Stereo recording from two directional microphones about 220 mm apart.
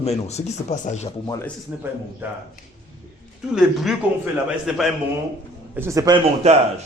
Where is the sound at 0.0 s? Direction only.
30° left (ahead or behind).